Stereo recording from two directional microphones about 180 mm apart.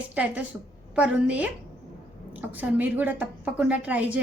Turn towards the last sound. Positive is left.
turn(degrees=-10)  # may be behind; listen again after turning